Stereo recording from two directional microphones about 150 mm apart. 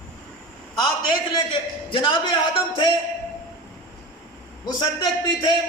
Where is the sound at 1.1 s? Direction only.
35° left (ahead or behind).